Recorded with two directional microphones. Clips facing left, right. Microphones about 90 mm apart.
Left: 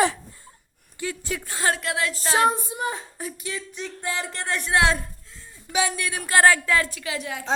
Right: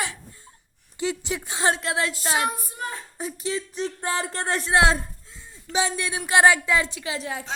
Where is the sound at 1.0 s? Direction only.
20° right (ahead or behind).